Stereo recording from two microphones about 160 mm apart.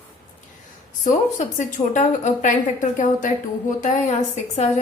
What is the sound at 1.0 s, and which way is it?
A woman's voice, 50° left (ahead or behind).